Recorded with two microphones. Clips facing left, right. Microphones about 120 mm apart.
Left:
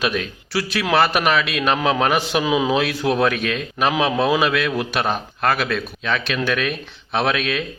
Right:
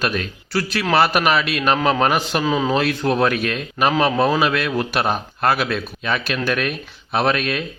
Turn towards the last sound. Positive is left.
turn(degrees=0)  # may be behind; listen again after turning